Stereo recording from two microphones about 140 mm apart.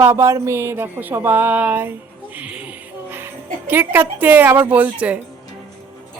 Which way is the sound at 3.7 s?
15° right (ahead or behind).